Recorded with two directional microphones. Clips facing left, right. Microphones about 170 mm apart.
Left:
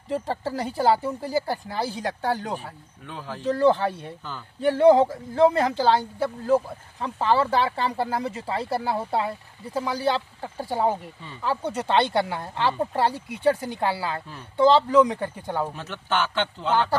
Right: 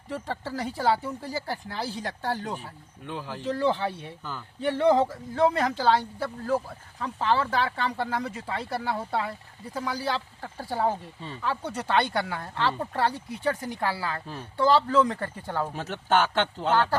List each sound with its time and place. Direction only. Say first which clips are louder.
0.1 s speech: left 5 dB; 35° left (ahead or behind)
1.5 s speech: left 4 dB; 50° left (ahead or behind)
4.2 s speech: even; 5° right (ahead or behind)
4.6 s speech: left 5 dB; 40° left (ahead or behind); by 15.7 s 15° left (ahead or behind)
15.7 s speech: right 3 dB; 45° right (ahead or behind)